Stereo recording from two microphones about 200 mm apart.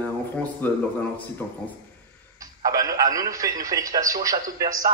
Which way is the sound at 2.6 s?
15° right (ahead or behind).